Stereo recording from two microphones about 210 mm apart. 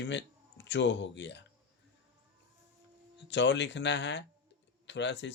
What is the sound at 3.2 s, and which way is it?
Speech, 55° left (ahead or behind).